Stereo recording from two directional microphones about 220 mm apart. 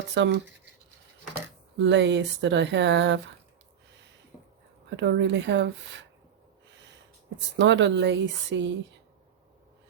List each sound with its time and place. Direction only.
0.1 s speech: 55° right (ahead or behind)
1.8 s speech: 55° right (ahead or behind)
4.9 s speech: 55° right (ahead or behind)
7.6 s speech: 55° right (ahead or behind)